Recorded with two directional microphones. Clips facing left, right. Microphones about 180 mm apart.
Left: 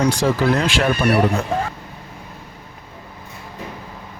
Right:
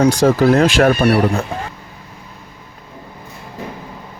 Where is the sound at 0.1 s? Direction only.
40° right (ahead or behind).